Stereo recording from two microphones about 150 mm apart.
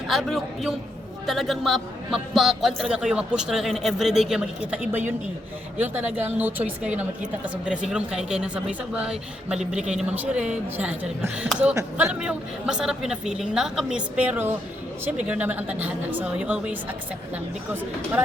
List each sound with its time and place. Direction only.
0.1 s a man's voice: centre (ahead or behind); by 12.1 s 15° right (ahead or behind)
12.2 s a man's voice: 5° right (ahead or behind)